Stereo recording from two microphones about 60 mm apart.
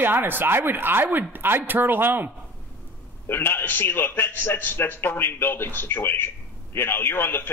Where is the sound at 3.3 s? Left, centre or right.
Left.